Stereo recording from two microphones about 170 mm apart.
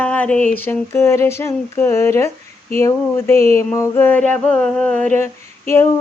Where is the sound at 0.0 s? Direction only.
10° left (ahead or behind).